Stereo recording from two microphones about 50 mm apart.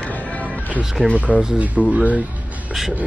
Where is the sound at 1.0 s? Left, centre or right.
Right.